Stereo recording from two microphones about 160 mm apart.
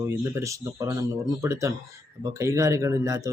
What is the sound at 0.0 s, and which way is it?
Speech, 20° right (ahead or behind).